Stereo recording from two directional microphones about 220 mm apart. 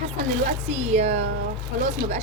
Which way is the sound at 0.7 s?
30° right (ahead or behind).